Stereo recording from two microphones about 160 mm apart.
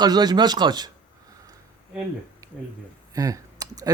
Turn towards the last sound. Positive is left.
turn(degrees=-20)  # may be behind; listen again after turning